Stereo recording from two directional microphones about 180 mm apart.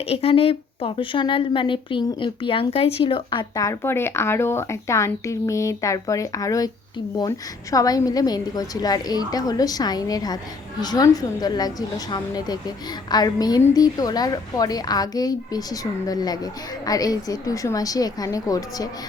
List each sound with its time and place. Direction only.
0.1 s a woman's voice: 30° left (ahead or behind)